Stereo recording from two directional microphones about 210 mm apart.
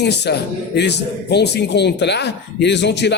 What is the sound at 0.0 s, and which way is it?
A man's voice, 55° left (ahead or behind).